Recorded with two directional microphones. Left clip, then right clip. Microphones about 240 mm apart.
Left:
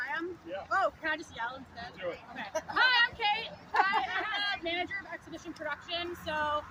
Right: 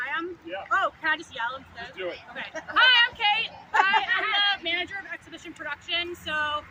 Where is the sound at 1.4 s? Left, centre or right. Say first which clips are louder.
Right 6 dB; centre.